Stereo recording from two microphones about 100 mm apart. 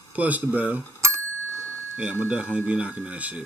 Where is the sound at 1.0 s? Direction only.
30° right (ahead or behind).